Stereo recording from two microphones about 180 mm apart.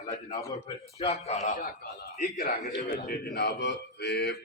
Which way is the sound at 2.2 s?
50° left (ahead or behind).